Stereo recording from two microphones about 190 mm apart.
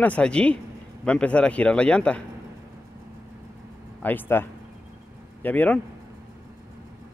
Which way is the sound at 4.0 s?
10° left (ahead or behind).